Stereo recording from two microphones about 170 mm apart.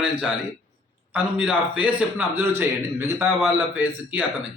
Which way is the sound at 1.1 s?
5° right (ahead or behind).